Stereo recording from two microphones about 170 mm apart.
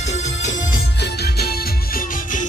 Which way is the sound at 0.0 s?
40° left (ahead or behind).